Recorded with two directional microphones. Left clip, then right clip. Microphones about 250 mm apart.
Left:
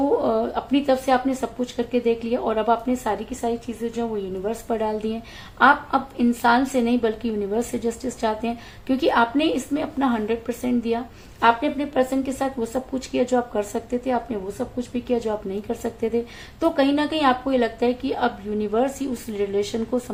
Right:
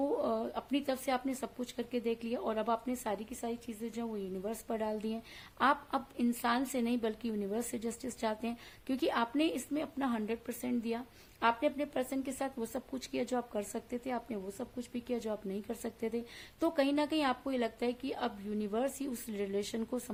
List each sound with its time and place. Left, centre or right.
0.2 s a woman's voice: right